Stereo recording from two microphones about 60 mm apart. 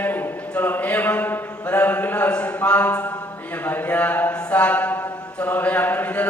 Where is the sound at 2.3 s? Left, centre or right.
Centre.